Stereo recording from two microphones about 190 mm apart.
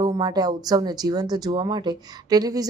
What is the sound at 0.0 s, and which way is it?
Speech, 20° right (ahead or behind).